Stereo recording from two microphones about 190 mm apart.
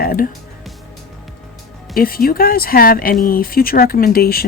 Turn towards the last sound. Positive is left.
turn(degrees=50)  # may be behind; listen again after turning